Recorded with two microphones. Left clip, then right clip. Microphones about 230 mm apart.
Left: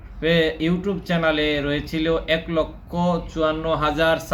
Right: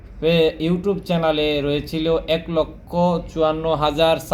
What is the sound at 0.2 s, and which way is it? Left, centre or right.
Speech, centre.